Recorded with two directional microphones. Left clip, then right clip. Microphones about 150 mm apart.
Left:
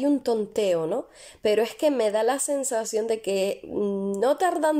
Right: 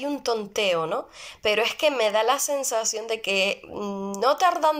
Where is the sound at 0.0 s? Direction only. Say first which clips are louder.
Left 3 dB; 50° left (ahead or behind).